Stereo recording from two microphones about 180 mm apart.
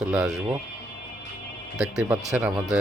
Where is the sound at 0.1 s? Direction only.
5° right (ahead or behind).